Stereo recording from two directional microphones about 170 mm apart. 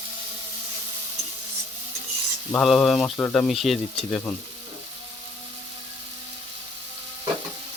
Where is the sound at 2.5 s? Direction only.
5° left (ahead or behind).